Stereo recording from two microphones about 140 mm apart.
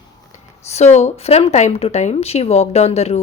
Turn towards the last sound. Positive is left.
turn(degrees=50)  # may be behind; listen again after turning